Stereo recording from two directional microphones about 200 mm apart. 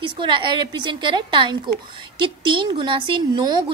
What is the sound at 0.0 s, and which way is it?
A woman's voice, 25° right (ahead or behind).